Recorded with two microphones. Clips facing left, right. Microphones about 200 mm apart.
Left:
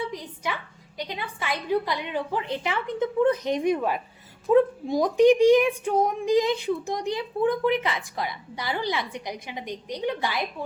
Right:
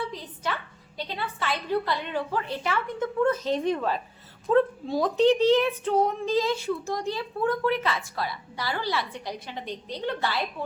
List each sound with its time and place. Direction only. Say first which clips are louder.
0.1 s speech: left 1 dB; 15° left (ahead or behind)